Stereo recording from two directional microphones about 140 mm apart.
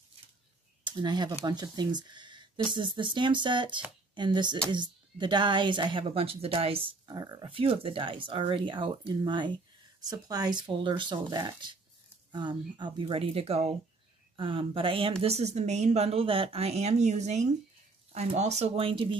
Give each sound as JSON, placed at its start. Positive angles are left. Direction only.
{"t": 0.8, "sound": "speech", "side_deg": -30}
{"t": 7.1, "sound": "speech", "side_deg": -30}
{"t": 15.2, "sound": "speech", "side_deg": -50}